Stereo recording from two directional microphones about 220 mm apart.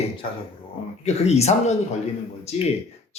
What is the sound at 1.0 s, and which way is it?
Speech, 30° left (ahead or behind).